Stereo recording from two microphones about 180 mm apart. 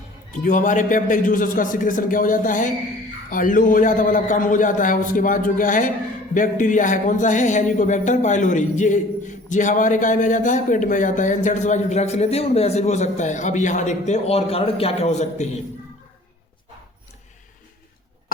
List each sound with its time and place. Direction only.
0.4 s speech: 45° left (ahead or behind)